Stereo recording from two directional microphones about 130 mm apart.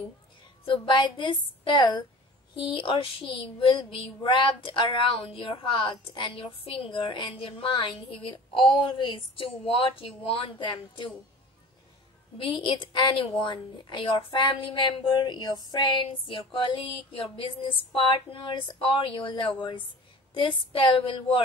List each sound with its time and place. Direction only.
0.7 s a woman's voice: 35° left (ahead or behind)
12.4 s a woman's voice: 40° left (ahead or behind)
17.2 s a sound: 45° left (ahead or behind)
18.3 s a woman's voice: 45° left (ahead or behind)